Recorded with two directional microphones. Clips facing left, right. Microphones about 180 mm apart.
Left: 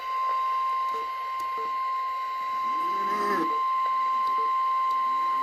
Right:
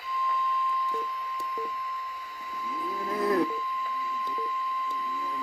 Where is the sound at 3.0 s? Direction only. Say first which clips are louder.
Right 5 dB; 30° right (ahead or behind).